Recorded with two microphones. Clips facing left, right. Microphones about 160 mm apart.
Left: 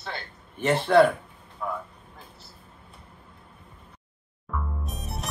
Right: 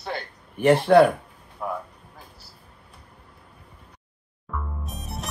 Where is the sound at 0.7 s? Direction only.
60° right (ahead or behind).